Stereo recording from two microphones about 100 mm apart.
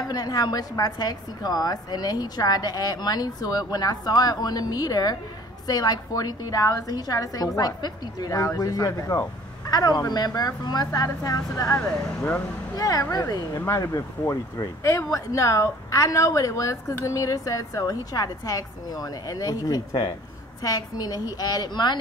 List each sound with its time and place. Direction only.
0.1 s a woman's voice: 40° left (ahead or behind)
13.7 s a woman's voice: 30° left (ahead or behind); by 22.0 s 45° left (ahead or behind)